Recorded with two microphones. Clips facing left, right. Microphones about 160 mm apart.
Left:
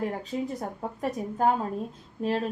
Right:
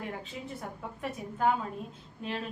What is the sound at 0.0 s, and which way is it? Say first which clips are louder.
A woman's voice: left 9 dB; 40° left (ahead or behind).